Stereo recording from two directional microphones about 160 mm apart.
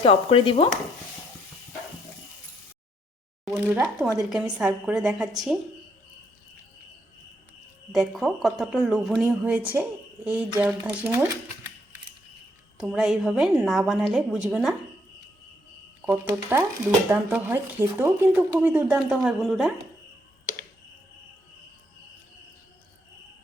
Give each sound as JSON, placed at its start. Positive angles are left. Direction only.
{"t": 0.0, "sound": "chopping", "side_deg": 35}
{"t": 3.4, "sound": "a woman's voice", "side_deg": -5}
{"t": 7.9, "sound": "a woman's voice", "side_deg": 0}
{"t": 10.8, "sound": "speech", "side_deg": -10}
{"t": 12.7, "sound": "a woman's voice", "side_deg": -5}
{"t": 16.0, "sound": "a woman's voice", "side_deg": -15}